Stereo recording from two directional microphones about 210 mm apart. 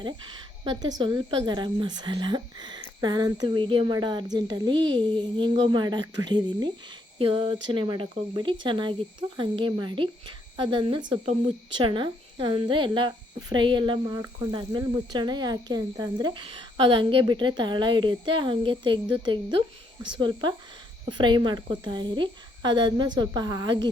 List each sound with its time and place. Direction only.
0.6 s a woman's voice: 20° right (ahead or behind)